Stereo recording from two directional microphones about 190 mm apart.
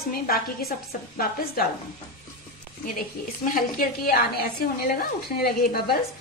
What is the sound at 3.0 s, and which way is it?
A woman's voice, 45° left (ahead or behind).